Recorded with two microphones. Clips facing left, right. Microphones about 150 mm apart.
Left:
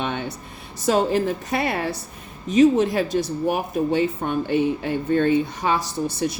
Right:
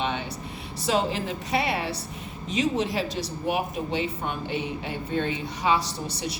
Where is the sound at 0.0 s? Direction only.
50° left (ahead or behind).